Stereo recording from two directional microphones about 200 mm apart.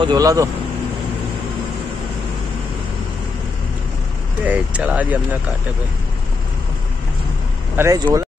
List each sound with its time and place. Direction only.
0.0 s speech: 20° right (ahead or behind)
4.5 s speech: 5° right (ahead or behind)
7.7 s speech: 15° right (ahead or behind)